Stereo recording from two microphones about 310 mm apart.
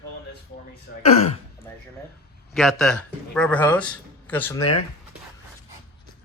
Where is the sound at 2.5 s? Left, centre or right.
Centre.